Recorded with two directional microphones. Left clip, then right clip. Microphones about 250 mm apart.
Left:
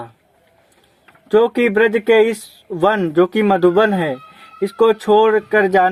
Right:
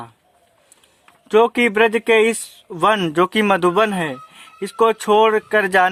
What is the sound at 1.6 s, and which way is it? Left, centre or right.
Speech, right.